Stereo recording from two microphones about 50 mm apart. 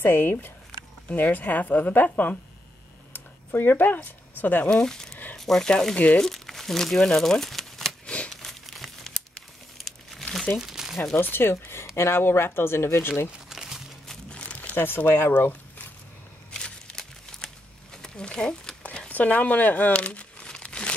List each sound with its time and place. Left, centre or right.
0.0 s speech: left
3.1 s a sound: left
4.6 s speech: centre
8.3 s crumpling: centre
10.5 s crumpling: centre
11.1 s speech: left
11.5 s speech: left
12.1 s speech: left
13.5 s crumpling: centre
14.0 s crumpling: left
14.9 s speech: left
15.3 s a sound: left
16.5 s a sound: centre
19.0 s crumpling: left